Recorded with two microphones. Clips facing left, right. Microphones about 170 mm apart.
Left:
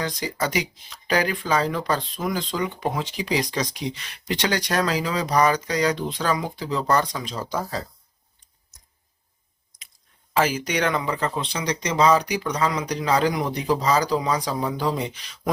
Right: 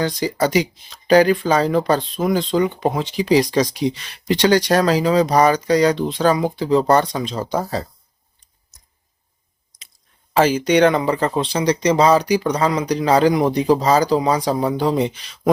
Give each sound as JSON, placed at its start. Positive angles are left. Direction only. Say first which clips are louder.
{"t": 0.0, "sound": "speech", "louder": "right 7 dB", "side_deg": -30}
{"t": 10.3, "sound": "speech", "louder": "right 8 dB", "side_deg": -30}